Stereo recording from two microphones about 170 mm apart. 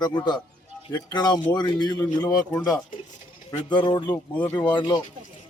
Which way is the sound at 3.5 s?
25° left (ahead or behind).